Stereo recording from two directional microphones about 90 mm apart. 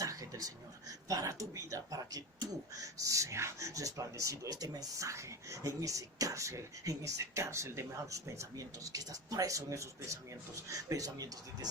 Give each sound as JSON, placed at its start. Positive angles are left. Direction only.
{"t": 0.0, "sound": "speech", "side_deg": -40}